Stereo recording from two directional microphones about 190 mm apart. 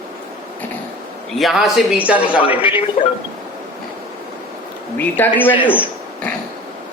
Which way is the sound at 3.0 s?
40° left (ahead or behind).